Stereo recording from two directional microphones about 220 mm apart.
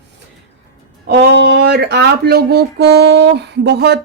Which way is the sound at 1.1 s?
50° right (ahead or behind).